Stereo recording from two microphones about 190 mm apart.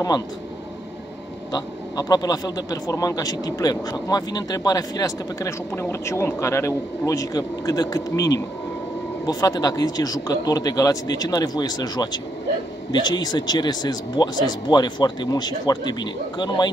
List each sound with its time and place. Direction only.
1.5 s a man's voice: 20° left (ahead or behind)